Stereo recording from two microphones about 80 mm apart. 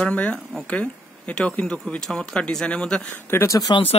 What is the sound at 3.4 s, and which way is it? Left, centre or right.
Speech, left.